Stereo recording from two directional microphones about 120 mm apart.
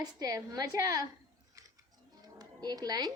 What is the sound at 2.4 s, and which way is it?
Speech, 35° right (ahead or behind).